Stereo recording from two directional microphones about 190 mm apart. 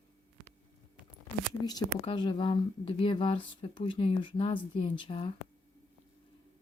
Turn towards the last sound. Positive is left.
turn(degrees=30)  # may be behind; listen again after turning